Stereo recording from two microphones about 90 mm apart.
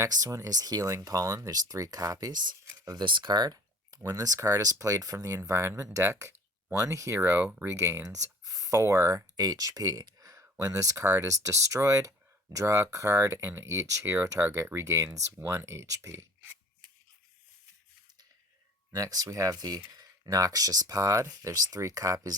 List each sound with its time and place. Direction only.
0.0 s speech: 40° right (ahead or behind)
2.6 s a sound: 40° right (ahead or behind)
3.0 s speech: 60° right (ahead or behind); by 5.4 s 40° right (ahead or behind)
5.4 s speech: 25° right (ahead or behind)
9.3 s speech: 45° right (ahead or behind)
18.9 s speech: 40° right (ahead or behind)